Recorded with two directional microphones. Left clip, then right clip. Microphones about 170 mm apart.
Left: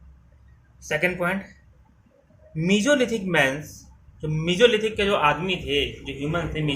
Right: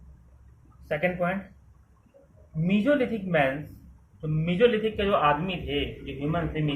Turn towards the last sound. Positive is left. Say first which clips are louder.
# left 2 dB
turn(degrees=30)  # may be behind; listen again after turning